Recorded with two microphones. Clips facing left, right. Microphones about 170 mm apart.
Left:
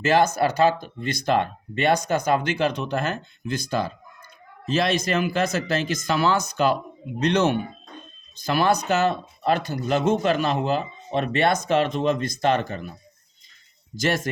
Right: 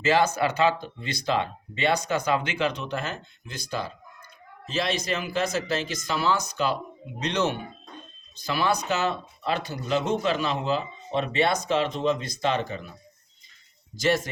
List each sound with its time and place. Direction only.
0.0 s speech: 50° left (ahead or behind)
13.9 s speech: 50° left (ahead or behind)